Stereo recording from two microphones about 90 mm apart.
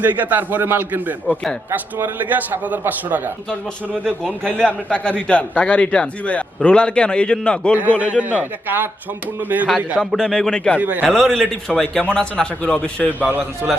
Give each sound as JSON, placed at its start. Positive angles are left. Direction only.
{"t": 0.0, "sound": "a man's voice", "side_deg": -20}
{"t": 4.0, "sound": "a man's voice", "side_deg": 5}
{"t": 7.8, "sound": "a man's voice", "side_deg": -20}
{"t": 10.0, "sound": "a man's voice", "side_deg": 5}
{"t": 10.8, "sound": "a man's voice", "side_deg": -20}
{"t": 11.1, "sound": "a man's voice", "side_deg": 5}
{"t": 13.6, "sound": "a man's voice", "side_deg": -15}